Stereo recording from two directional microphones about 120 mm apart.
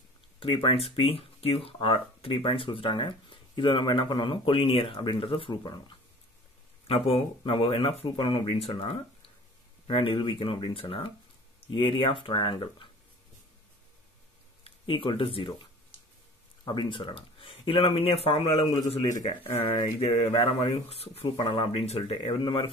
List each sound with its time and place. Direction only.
0.4 s speech: 50° left (ahead or behind)
6.9 s speech: 55° left (ahead or behind)
8.6 s speech: 55° left (ahead or behind)
14.6 s speech: 50° left (ahead or behind)
16.6 s speech: 40° left (ahead or behind)